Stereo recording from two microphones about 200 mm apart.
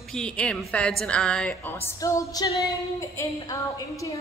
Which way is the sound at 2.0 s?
15° left (ahead or behind).